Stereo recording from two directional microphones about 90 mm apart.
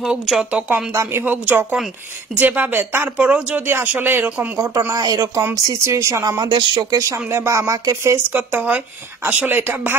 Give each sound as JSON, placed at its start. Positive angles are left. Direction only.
{"t": 0.0, "sound": "a woman's voice", "side_deg": -5}
{"t": 4.6, "sound": "speech", "side_deg": -40}
{"t": 6.2, "sound": "speech", "side_deg": -45}
{"t": 7.0, "sound": "speech", "side_deg": -35}
{"t": 8.3, "sound": "a woman's voice", "side_deg": -20}